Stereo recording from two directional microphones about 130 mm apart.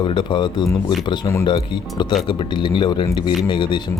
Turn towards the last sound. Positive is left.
turn(degrees=35)  # may be behind; listen again after turning